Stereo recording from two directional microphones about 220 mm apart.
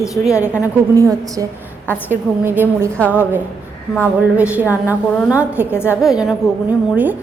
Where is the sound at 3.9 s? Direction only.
5° right (ahead or behind).